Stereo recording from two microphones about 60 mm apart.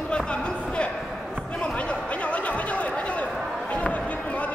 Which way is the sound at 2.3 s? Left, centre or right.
Left.